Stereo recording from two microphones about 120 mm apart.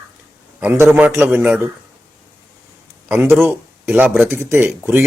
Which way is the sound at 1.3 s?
10° right (ahead or behind).